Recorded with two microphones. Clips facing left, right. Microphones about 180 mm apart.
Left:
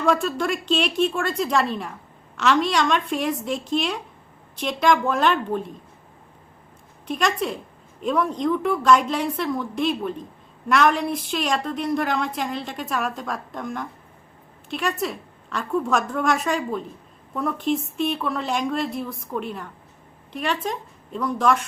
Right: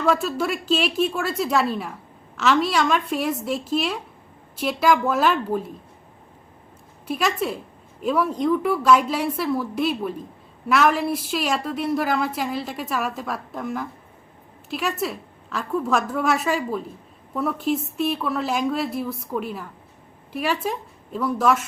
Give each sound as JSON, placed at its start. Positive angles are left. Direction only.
{"t": 0.0, "sound": "a woman's voice", "side_deg": -5}
{"t": 7.1, "sound": "a woman's voice", "side_deg": -5}